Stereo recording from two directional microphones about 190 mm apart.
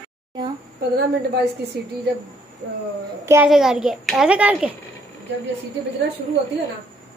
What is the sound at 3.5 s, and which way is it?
A woman's voice, 5° right (ahead or behind).